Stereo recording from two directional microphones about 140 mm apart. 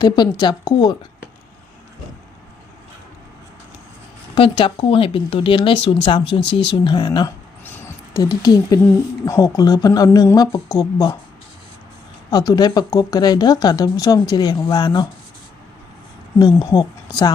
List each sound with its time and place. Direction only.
0.0 s speech: 30° left (ahead or behind)
4.4 s speech: 40° left (ahead or behind)
12.3 s speech: 30° left (ahead or behind)
16.4 s speech: 30° left (ahead or behind)